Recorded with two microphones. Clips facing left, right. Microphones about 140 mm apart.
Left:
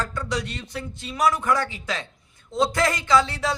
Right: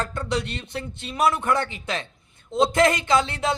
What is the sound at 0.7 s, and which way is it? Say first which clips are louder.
Speech: right 1 dB; 60° right (ahead or behind).